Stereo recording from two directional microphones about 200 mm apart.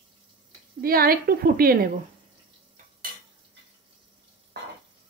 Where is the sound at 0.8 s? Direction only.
45° right (ahead or behind).